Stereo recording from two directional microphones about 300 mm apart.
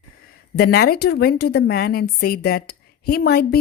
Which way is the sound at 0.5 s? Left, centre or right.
Left.